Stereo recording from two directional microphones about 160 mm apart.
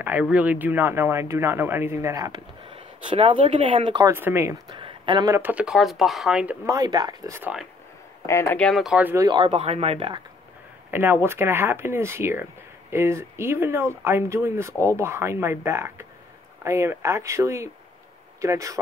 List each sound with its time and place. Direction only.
0.0 s speech: 10° right (ahead or behind); by 4.1 s 30° right (ahead or behind)
4.1 s speech: 15° right (ahead or behind)
4.6 s a sound: 30° right (ahead or behind)
5.3 s speech: 10° right (ahead or behind)
6.6 s speech: 20° right (ahead or behind)
8.3 s speech: 20° left (ahead or behind)
8.5 s speech: centre (ahead or behind)
9.2 s speech: 30° right (ahead or behind)
10.9 s speech: 15° right (ahead or behind)